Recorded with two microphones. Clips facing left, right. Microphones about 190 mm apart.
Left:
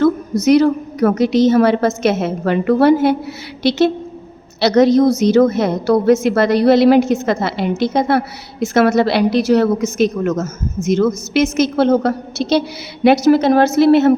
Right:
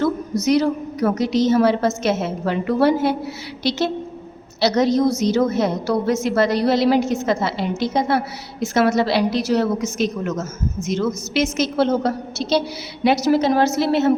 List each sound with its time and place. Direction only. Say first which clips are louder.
0.0 s a woman's voice: left 6 dB; 60° left (ahead or behind)